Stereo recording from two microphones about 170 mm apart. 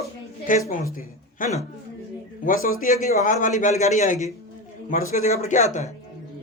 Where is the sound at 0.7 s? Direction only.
55° left (ahead or behind).